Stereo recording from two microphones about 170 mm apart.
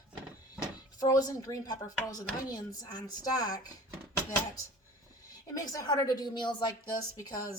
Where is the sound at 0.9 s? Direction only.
20° left (ahead or behind).